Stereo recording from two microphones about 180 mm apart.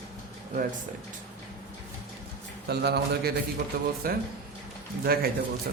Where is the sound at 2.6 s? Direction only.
65° right (ahead or behind).